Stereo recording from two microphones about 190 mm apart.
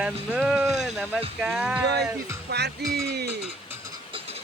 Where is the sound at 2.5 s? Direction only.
60° right (ahead or behind).